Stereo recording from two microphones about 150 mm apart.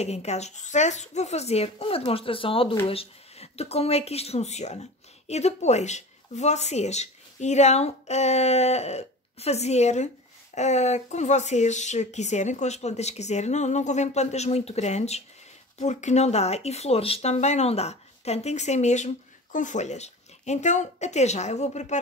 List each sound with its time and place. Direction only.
0.0 s speech: 45° left (ahead or behind)